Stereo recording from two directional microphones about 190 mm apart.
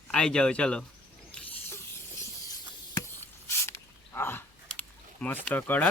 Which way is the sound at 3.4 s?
15° left (ahead or behind).